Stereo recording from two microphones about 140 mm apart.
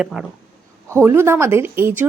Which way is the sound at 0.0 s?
5° right (ahead or behind).